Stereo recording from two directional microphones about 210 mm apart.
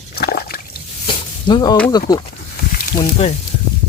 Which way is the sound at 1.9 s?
20° left (ahead or behind).